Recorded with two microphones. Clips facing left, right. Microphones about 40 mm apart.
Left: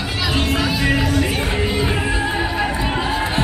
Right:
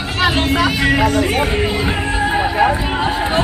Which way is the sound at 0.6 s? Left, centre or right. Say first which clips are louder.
Right 4 dB; right.